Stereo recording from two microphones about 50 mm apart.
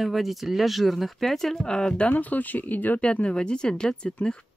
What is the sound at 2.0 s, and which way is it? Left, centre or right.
Speech, left.